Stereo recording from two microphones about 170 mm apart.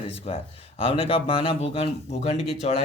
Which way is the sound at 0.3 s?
40° left (ahead or behind).